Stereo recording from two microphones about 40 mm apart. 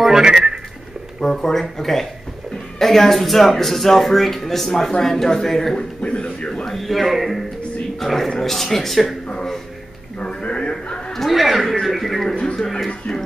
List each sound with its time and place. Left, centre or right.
0.2 s speech: centre
1.2 s speech: centre
5.8 s speech: left
6.5 s speech: centre
10.2 s a sound: left
11.1 s speech: centre